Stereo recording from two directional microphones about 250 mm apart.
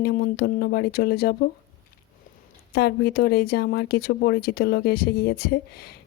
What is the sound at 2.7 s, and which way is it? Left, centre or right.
Speech, left.